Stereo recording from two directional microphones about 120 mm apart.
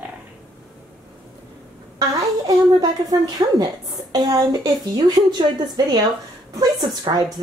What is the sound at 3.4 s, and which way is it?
A woman's voice, 35° right (ahead or behind).